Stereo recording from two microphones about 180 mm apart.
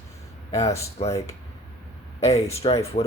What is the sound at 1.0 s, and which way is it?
Speech, 30° left (ahead or behind).